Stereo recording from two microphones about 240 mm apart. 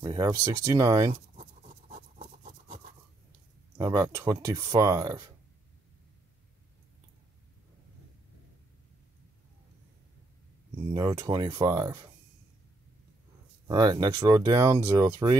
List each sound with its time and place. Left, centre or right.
0.0 s speech: centre
1.3 s a sound: right
3.7 s speech: centre
10.9 s speech: centre
13.7 s speech: centre